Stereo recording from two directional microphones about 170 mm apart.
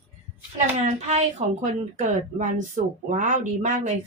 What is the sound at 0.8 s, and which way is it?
Speech, 40° right (ahead or behind).